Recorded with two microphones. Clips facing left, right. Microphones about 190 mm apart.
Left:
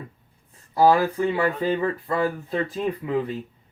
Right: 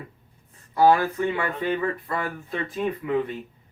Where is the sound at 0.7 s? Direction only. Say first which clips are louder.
Left 1 dB; 30° left (ahead or behind).